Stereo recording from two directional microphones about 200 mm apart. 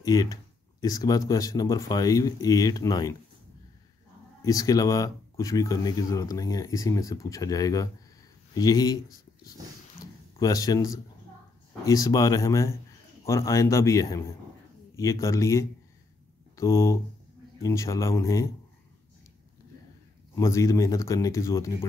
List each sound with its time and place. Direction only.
0.0 s speech: 20° left (ahead or behind)
4.5 s speech: 20° left (ahead or behind)
20.3 s speech: 15° left (ahead or behind)